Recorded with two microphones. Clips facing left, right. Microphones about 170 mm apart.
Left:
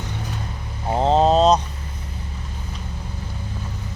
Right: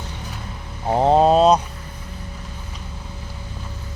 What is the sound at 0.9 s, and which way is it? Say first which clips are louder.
Mantra: right 2 dB; 15° right (ahead or behind).